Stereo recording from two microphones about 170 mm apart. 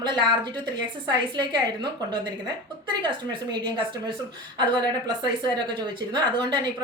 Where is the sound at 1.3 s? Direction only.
25° right (ahead or behind).